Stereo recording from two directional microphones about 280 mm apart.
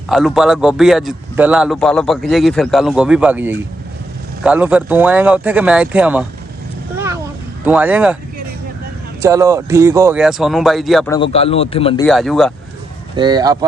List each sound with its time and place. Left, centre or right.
0.1 s a man's voice: centre
7.6 s a man's voice: centre
9.2 s a man's voice: centre
11.1 s speech: centre
12.0 s a man's voice: centre
13.1 s speech: centre